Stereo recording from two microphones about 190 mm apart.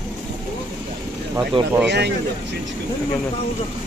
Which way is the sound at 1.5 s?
25° right (ahead or behind).